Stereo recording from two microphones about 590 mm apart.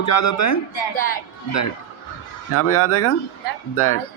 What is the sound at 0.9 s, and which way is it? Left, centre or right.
Speech, centre.